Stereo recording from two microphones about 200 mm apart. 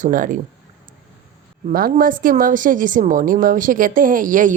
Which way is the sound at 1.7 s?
45° right (ahead or behind).